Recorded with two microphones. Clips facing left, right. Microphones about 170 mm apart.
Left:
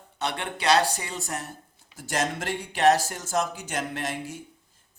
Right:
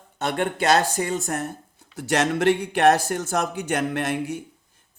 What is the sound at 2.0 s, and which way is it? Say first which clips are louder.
Speech: right 7 dB; 70° right (ahead or behind).